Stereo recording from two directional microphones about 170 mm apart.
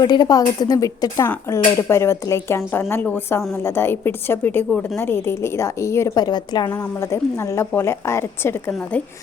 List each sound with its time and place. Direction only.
0.0 s a woman's voice: 25° left (ahead or behind)